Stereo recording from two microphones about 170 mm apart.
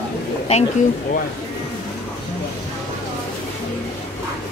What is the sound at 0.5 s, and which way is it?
Speech, 40° left (ahead or behind).